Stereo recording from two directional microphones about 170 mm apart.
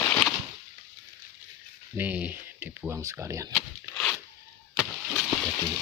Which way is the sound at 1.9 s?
10° right (ahead or behind).